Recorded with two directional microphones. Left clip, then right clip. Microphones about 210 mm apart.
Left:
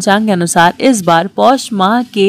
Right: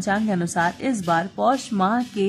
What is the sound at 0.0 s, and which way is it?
Speech, 40° left (ahead or behind).